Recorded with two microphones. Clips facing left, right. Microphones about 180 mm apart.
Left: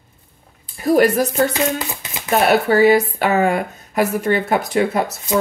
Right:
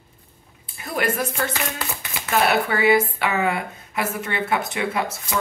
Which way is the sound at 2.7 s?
40° left (ahead or behind).